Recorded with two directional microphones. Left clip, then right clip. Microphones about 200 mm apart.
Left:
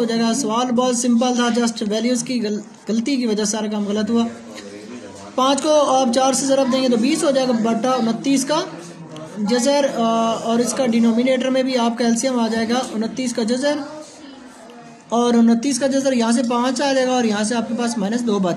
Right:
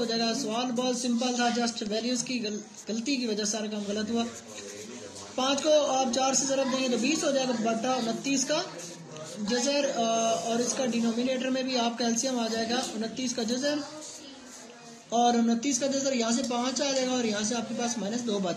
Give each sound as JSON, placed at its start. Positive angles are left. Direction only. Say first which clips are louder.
{"t": 0.0, "sound": "a man's voice", "louder": "left 9 dB", "side_deg": 55}
{"t": 5.3, "sound": "a man's voice", "louder": "left 8 dB", "side_deg": 55}
{"t": 15.0, "sound": "speech", "louder": "left 8 dB", "side_deg": 55}